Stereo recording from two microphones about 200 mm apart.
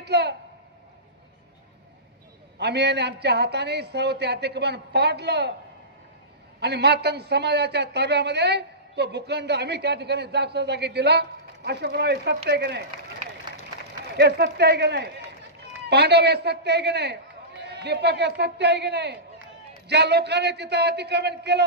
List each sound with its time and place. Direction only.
0.0 s a woman's voice: 55° right (ahead or behind)
2.6 s a woman's voice: 55° right (ahead or behind)
6.6 s a woman's voice: 55° right (ahead or behind)
14.1 s a woman's voice: 60° right (ahead or behind)